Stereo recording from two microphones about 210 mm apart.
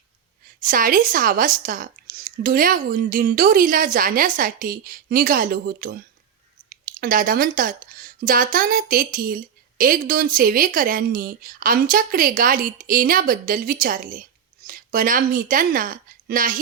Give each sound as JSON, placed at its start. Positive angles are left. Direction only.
{"t": 0.6, "sound": "speech", "side_deg": -40}